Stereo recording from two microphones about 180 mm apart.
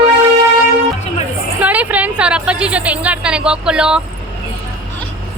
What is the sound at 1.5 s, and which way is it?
A woman's voice, 10° right (ahead or behind).